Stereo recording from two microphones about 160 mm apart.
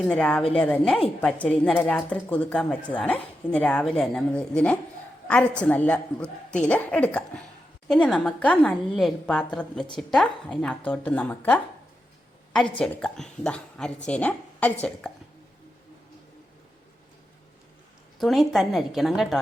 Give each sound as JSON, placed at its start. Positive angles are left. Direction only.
{"t": 0.0, "sound": "a woman's voice", "side_deg": 5}
{"t": 12.8, "sound": "speech", "side_deg": 5}
{"t": 18.2, "sound": "speech", "side_deg": 0}